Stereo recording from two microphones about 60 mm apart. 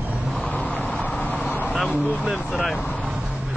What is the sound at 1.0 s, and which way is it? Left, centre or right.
Vehicle, left.